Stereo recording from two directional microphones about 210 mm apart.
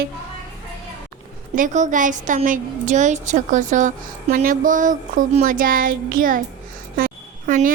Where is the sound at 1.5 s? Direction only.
35° right (ahead or behind).